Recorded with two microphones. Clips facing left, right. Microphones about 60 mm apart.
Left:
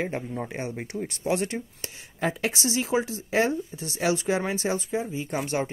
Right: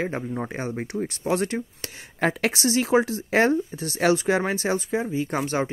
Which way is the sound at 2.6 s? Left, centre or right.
Right.